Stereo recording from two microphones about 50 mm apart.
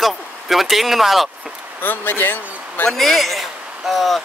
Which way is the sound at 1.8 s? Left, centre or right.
Left.